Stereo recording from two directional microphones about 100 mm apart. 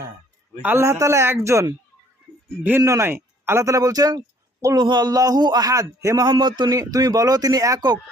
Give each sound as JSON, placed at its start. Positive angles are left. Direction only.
{"t": 0.6, "sound": "a man's voice", "side_deg": -25}
{"t": 2.8, "sound": "a man's voice", "side_deg": -30}
{"t": 6.2, "sound": "a man's voice", "side_deg": -45}
{"t": 6.7, "sound": "a man's voice", "side_deg": -35}